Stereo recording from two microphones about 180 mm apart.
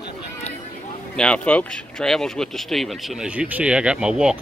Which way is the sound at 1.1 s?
5° left (ahead or behind).